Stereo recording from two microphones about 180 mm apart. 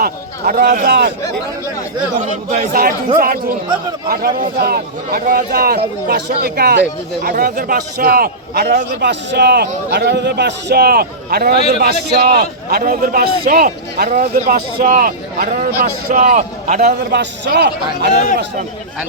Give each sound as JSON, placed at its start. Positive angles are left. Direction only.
{"t": 0.0, "sound": "a man's voice", "side_deg": -55}
{"t": 2.1, "sound": "a man's voice", "side_deg": -45}
{"t": 17.1, "sound": "a man's voice", "side_deg": -70}